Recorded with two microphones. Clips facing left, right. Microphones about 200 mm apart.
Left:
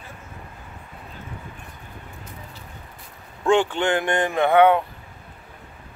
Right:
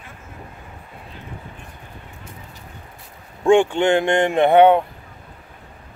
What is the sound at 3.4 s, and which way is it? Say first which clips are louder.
Speech: right 5 dB; 25° right (ahead or behind).